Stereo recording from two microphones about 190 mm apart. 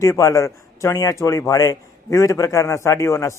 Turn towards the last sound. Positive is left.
turn(degrees=15)  # may be behind; listen again after turning